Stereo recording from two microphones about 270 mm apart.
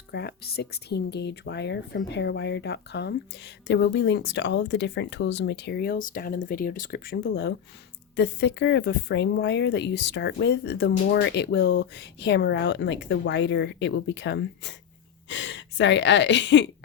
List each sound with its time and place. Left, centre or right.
0.1 s speech: left